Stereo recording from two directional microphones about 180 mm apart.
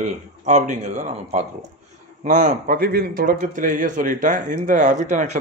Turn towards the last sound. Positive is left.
turn(degrees=-40)  # may be behind; listen again after turning